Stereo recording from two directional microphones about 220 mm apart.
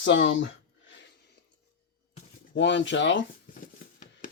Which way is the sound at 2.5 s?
55° left (ahead or behind).